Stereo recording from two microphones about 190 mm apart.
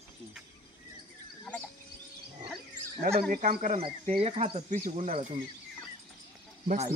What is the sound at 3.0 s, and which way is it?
Speech, 35° right (ahead or behind).